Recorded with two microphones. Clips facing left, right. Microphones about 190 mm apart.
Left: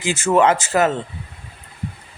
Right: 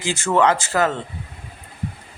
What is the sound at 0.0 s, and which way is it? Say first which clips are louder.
Speech: left 2 dB; 15° left (ahead or behind).